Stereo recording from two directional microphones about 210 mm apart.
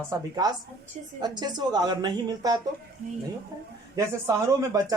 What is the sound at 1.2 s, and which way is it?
Speech, 20° right (ahead or behind).